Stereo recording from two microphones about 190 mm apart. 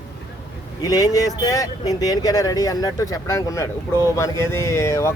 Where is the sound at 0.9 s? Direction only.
20° left (ahead or behind).